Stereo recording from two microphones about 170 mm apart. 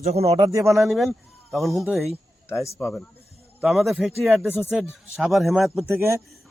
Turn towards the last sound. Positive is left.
turn(degrees=-15)  # may be behind; listen again after turning